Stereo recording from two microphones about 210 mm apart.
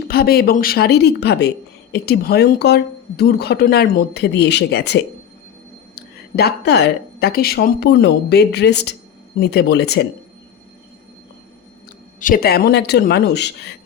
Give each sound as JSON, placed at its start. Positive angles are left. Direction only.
{"t": 0.1, "sound": "speech", "side_deg": 45}
{"t": 12.2, "sound": "speech", "side_deg": 45}